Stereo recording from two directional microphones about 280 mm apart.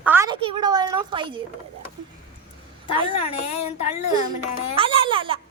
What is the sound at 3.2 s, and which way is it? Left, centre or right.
Speech, centre.